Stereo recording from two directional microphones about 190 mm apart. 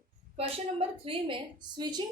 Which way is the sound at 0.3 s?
30° right (ahead or behind).